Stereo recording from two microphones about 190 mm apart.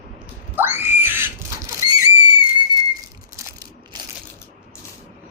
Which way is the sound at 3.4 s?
15° right (ahead or behind).